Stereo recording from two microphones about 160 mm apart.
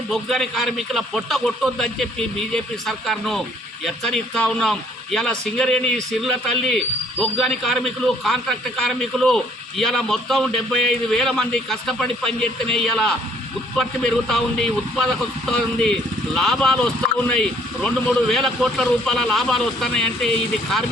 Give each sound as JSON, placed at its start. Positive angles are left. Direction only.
{"t": 0.1, "sound": "speech", "side_deg": 0}